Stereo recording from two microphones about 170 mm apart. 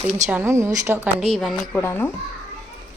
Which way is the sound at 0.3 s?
15° right (ahead or behind).